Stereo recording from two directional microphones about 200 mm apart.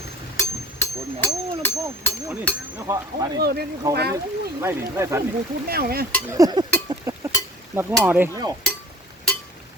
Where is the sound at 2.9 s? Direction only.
15° right (ahead or behind).